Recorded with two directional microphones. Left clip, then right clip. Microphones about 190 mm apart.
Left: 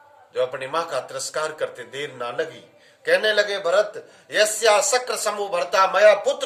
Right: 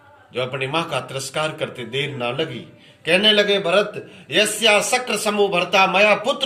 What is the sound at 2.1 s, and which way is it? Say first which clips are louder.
Speech: right 3 dB; 20° left (ahead or behind).